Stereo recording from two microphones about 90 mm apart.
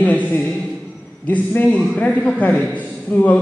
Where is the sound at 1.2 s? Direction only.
15° left (ahead or behind).